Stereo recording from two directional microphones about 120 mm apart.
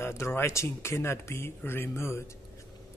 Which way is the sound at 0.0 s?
20° left (ahead or behind).